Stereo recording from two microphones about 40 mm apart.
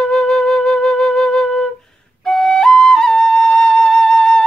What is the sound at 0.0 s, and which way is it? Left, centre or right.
Flute, centre.